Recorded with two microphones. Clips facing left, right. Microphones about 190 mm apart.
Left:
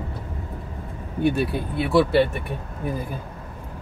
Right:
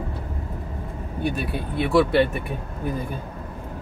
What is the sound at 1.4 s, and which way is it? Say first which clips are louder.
Speech: left 1 dB; centre (ahead or behind).